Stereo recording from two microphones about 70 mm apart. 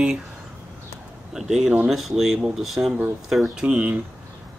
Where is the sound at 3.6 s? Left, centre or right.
Centre.